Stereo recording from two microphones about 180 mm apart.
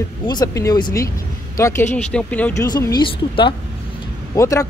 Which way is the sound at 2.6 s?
20° left (ahead or behind).